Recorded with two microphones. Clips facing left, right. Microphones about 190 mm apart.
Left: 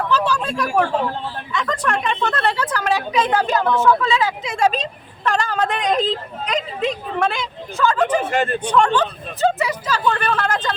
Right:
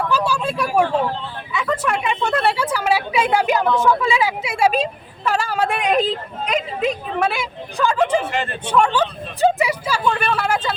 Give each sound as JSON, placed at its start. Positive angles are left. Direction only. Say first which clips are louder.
{"t": 0.1, "sound": "a sound", "louder": "even", "side_deg": -10}
{"t": 1.5, "sound": "a woman's voice", "louder": "right 1 dB", "side_deg": -5}
{"t": 8.2, "sound": "speech", "louder": "left 4 dB", "side_deg": 45}
{"t": 8.7, "sound": "a woman's voice", "louder": "right 1 dB", "side_deg": -10}